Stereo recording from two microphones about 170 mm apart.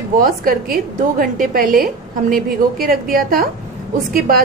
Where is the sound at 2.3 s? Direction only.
55° right (ahead or behind).